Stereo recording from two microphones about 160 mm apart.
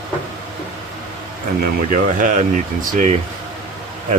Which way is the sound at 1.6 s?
55° right (ahead or behind).